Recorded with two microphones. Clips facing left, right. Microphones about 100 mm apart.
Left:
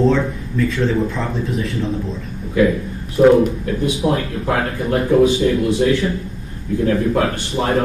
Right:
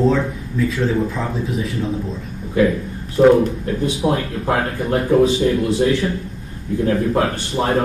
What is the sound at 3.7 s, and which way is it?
A man's voice, 30° right (ahead or behind).